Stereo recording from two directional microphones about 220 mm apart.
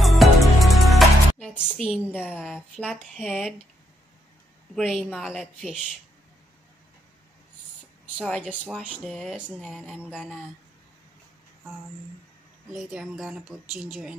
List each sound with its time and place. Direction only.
0.0 s music: centre (ahead or behind)
2.1 s speech: 5° right (ahead or behind)
4.7 s speech: centre (ahead or behind)
8.2 s speech: 5° left (ahead or behind)
12.7 s speech: centre (ahead or behind)